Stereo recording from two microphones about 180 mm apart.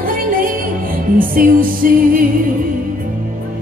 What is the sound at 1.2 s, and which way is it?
Music, 50° right (ahead or behind).